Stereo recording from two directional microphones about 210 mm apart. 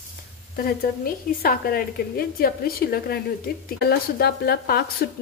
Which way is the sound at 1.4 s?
45° left (ahead or behind).